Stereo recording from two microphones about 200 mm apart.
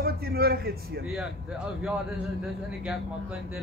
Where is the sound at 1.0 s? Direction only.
5° right (ahead or behind).